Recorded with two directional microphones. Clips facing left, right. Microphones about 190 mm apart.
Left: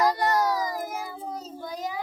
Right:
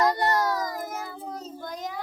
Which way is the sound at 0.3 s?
10° left (ahead or behind).